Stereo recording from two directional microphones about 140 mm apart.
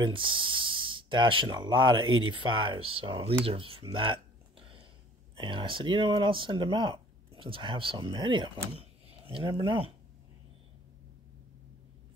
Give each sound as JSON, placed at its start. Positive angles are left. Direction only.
{"t": 0.0, "sound": "speech", "side_deg": -35}
{"t": 3.4, "sound": "a sound", "side_deg": -40}
{"t": 5.3, "sound": "speech", "side_deg": -35}